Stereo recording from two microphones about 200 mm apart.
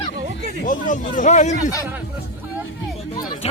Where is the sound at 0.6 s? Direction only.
40° left (ahead or behind).